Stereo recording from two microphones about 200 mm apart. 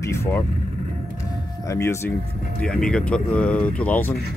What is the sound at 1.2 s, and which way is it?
Music, 15° left (ahead or behind).